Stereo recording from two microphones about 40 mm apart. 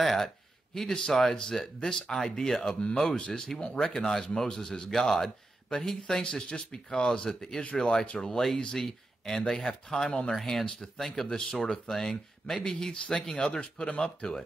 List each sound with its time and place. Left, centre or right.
0.0 s a man's voice: centre